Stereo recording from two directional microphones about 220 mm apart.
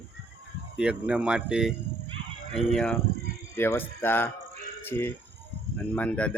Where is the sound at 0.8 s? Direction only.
5° right (ahead or behind).